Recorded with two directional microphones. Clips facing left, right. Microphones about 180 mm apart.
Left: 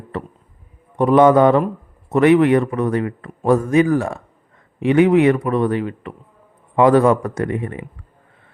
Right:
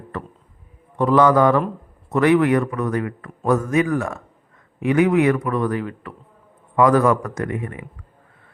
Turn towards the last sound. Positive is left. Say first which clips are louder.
# left 4 dB
turn(degrees=30)  # may be behind; listen again after turning